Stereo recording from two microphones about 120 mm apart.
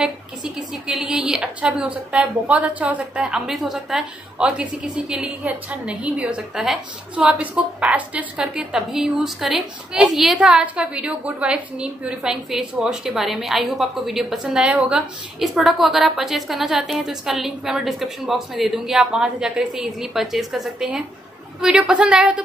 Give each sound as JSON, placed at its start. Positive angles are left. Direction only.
{"t": 0.0, "sound": "a woman's voice", "side_deg": -5}